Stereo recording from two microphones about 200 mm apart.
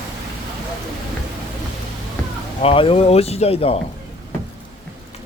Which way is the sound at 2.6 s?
30° left (ahead or behind).